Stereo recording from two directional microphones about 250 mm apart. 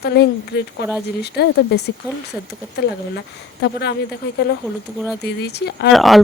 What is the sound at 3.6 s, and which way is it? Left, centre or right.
Speech, left.